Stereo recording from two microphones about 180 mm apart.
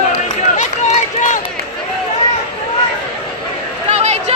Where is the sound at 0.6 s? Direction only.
40° left (ahead or behind).